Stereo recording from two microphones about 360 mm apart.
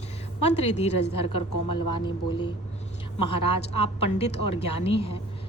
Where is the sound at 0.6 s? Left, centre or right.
Centre.